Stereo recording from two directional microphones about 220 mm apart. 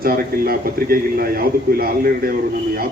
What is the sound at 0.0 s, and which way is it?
A man's voice, 40° right (ahead or behind).